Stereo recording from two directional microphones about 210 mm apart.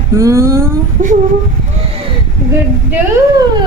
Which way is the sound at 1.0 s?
35° right (ahead or behind).